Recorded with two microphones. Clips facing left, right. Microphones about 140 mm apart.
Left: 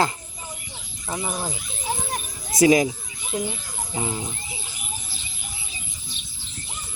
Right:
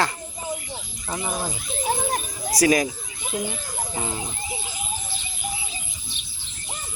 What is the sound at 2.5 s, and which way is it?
Speech, 20° left (ahead or behind).